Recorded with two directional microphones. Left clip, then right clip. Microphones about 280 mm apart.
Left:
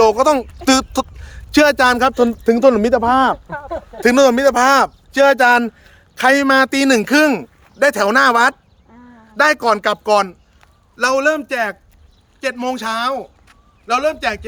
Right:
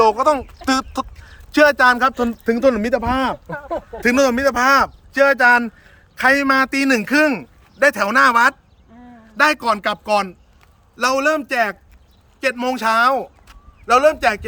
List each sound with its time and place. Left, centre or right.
0.0 s a man's voice: left; by 10.7 s centre
10.9 s a man's voice: centre